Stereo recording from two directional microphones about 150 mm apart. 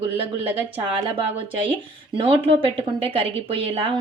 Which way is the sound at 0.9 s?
35° right (ahead or behind).